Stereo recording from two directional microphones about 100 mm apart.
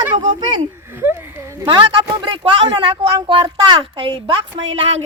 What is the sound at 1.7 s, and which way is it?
A woman's voice, 50° right (ahead or behind).